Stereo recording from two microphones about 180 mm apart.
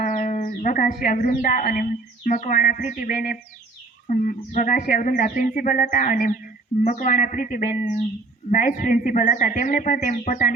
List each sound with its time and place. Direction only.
0.0 s speech: 45° left (ahead or behind)